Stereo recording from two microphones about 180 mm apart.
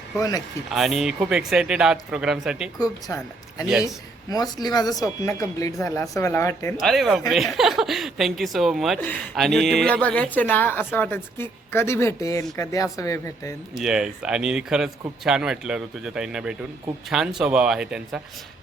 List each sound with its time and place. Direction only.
0.2 s speech: 20° left (ahead or behind)
0.7 s speech: centre (ahead or behind)
2.7 s a woman's voice: 20° left (ahead or behind)
6.7 s a woman's voice: centre (ahead or behind); by 13.5 s 20° left (ahead or behind)
13.7 s speech: 5° right (ahead or behind)